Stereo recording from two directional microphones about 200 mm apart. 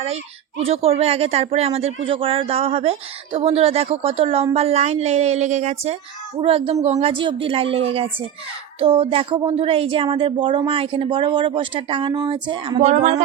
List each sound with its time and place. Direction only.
0.6 s a woman's voice: 30° right (ahead or behind)